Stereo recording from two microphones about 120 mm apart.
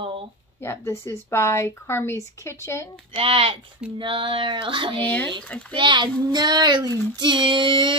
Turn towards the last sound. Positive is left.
turn(degrees=-40)  # may be behind; listen again after turning